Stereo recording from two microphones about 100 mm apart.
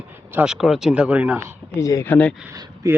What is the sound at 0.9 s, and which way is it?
Speech, 15° right (ahead or behind).